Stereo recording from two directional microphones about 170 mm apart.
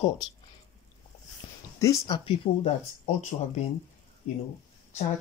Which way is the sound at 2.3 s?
40° left (ahead or behind).